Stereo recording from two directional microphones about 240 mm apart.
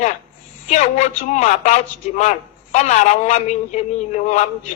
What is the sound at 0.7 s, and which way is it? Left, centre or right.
Speech, left.